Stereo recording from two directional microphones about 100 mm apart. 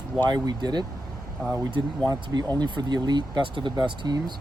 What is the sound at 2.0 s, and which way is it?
Speech, 40° right (ahead or behind).